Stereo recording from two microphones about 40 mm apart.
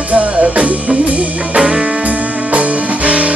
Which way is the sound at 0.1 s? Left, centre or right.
Right.